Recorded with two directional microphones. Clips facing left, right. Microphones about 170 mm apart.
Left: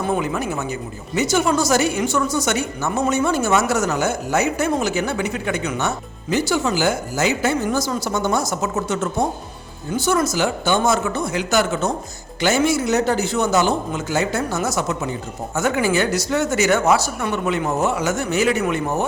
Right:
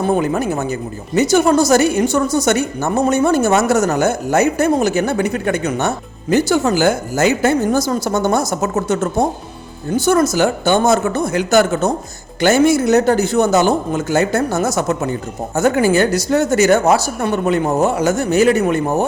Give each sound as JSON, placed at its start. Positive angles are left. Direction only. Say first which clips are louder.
{"t": 0.2, "sound": "speech", "louder": "right 5 dB", "side_deg": -40}
{"t": 10.1, "sound": "speech", "louder": "right 5 dB", "side_deg": -50}
{"t": 15.5, "sound": "speech", "louder": "right 6 dB", "side_deg": -40}